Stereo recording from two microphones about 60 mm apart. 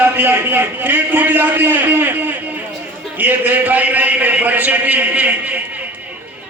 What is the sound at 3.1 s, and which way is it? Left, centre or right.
A man's voice, right.